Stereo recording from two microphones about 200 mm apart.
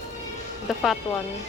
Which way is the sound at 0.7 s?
Centre (ahead or behind).